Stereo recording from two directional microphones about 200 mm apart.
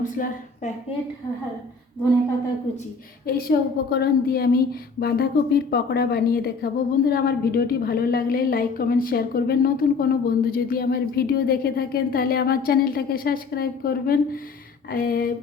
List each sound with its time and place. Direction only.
0.0 s a woman's voice: 40° left (ahead or behind)
3.2 s a woman's voice: 50° left (ahead or behind)